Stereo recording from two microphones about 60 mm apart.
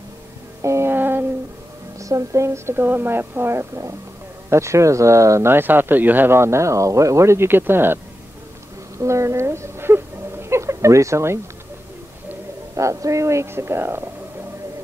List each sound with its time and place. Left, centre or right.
0.6 s music: right
0.9 s a sound: right
2.0 s speech: right
5.5 s speech: right
6.3 s speech: right
8.9 s a sound: right
12.7 s speech: right